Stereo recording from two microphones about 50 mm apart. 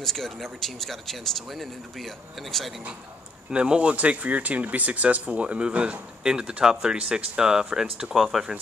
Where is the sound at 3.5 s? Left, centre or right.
Centre.